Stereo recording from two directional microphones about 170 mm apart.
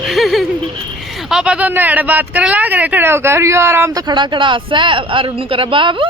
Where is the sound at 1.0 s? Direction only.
Centre (ahead or behind).